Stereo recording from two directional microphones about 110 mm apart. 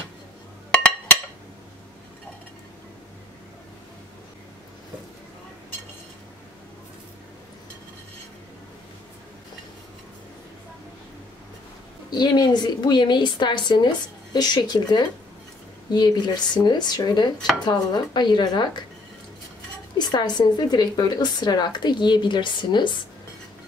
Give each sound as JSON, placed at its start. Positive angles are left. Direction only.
{"t": 12.1, "sound": "a woman's voice", "side_deg": 40}
{"t": 20.0, "sound": "a woman's voice", "side_deg": 45}